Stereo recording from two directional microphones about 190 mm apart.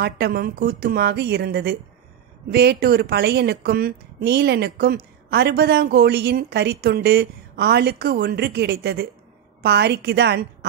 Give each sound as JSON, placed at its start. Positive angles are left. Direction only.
{"t": 0.0, "sound": "a woman's voice", "side_deg": -55}